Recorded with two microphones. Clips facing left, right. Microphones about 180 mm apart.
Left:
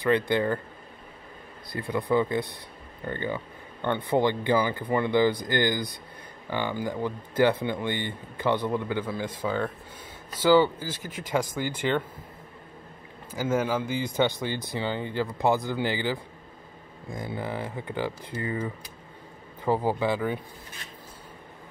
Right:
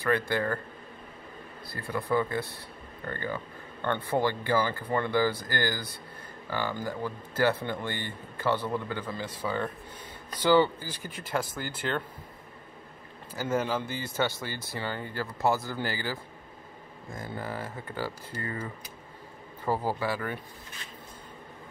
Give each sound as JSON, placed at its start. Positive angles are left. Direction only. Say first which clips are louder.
{"t": 0.0, "sound": "speech", "louder": "left 4 dB", "side_deg": 20}
{"t": 1.7, "sound": "speech", "louder": "left 4 dB", "side_deg": 15}
{"t": 13.4, "sound": "speech", "louder": "left 3 dB", "side_deg": 10}